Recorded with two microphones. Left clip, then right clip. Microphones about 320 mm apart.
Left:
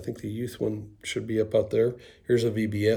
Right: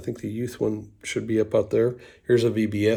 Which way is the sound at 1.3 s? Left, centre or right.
Centre.